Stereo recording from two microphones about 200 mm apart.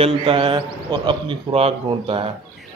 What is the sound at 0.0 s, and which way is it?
Speech, 25° right (ahead or behind).